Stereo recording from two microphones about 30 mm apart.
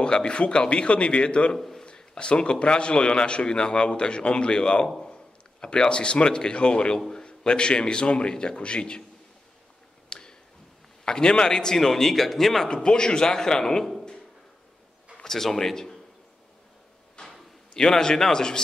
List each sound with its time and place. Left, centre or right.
0.0 s a man's voice: left
1.6 s a sound: centre
2.1 s a man's voice: left
10.0 s tick: left
11.1 s a man's voice: left; by 12.6 s centre
12.6 s a man's voice: left
15.2 s a man's voice: centre
17.2 s a sound: centre